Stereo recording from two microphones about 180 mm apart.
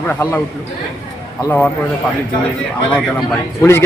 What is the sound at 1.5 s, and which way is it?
Speech, 10° left (ahead or behind).